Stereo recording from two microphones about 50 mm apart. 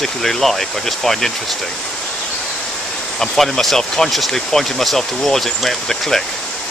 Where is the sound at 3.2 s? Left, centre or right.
Centre.